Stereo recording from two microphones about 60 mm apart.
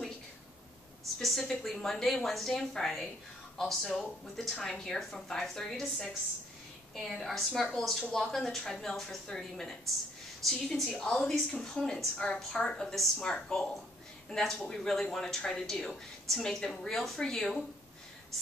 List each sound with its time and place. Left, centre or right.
1.2 s a woman's voice: centre
10.5 s a woman's voice: centre
11.0 s a woman's voice: centre